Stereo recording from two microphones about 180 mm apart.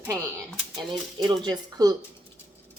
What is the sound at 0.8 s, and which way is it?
Speech, 25° right (ahead or behind).